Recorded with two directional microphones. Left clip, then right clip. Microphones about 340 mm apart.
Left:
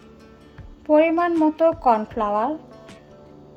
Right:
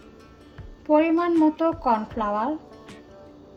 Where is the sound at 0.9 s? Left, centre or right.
Centre.